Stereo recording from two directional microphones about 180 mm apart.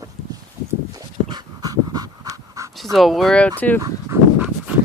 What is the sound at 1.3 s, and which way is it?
Dog, 20° right (ahead or behind).